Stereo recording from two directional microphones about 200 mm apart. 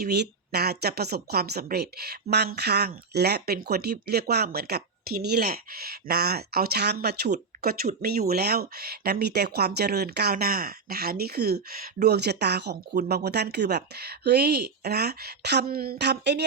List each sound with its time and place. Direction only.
0.0 s speech: 55° right (ahead or behind)